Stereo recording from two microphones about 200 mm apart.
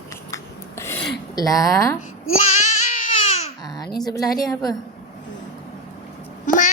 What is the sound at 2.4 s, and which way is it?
Child singing, 35° left (ahead or behind).